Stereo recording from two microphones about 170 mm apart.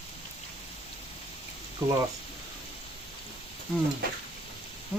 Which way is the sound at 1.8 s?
20° right (ahead or behind).